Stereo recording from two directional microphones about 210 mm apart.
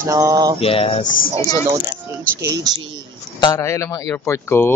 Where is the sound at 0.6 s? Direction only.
30° left (ahead or behind).